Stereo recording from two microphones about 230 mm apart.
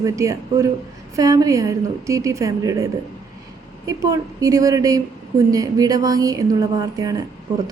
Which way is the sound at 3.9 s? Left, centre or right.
Centre.